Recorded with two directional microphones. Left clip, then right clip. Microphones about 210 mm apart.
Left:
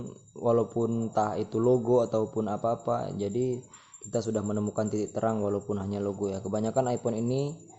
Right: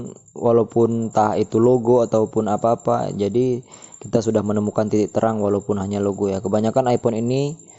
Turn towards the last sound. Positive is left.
turn(degrees=-30)  # may be behind; listen again after turning